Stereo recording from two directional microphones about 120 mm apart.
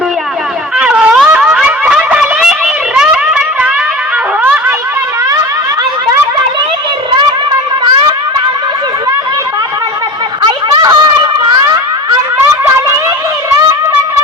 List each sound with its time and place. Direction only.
0.8 s a sound: 10° right (ahead or behind)
7.2 s music: 35° right (ahead or behind)
10.4 s snicker: 40° right (ahead or behind)